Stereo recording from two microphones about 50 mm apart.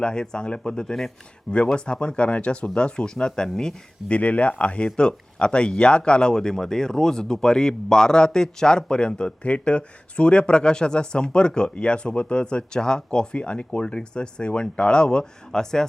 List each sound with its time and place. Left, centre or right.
0.0 s speech: centre
4.1 s speech: left; by 15.9 s centre